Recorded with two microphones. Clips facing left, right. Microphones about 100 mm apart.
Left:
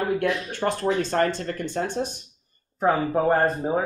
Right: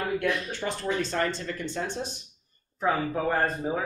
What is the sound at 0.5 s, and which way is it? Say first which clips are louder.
Speech: left 6 dB; 50° left (ahead or behind).